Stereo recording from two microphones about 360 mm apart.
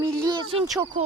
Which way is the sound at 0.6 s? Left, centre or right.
Centre.